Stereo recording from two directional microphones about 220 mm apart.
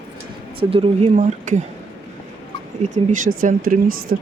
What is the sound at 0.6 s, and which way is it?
Speech, 25° right (ahead or behind).